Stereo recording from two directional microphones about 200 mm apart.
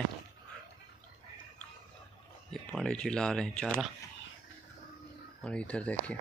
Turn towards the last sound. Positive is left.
turn(degrees=5)  # may be behind; listen again after turning